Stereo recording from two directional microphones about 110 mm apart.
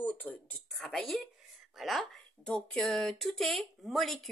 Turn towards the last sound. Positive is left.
turn(degrees=0)  # may be behind; listen again after turning